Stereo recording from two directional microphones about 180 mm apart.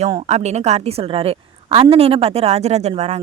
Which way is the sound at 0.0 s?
35° right (ahead or behind).